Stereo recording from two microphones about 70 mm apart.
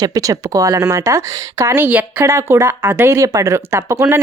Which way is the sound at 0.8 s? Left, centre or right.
Right.